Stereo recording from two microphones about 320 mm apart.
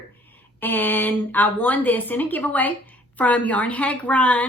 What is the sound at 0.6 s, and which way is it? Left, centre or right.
A woman's voice, centre.